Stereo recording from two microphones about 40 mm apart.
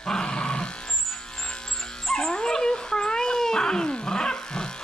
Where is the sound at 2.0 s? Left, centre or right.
Centre.